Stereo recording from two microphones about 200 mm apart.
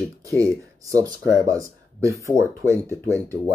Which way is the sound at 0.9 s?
15° right (ahead or behind).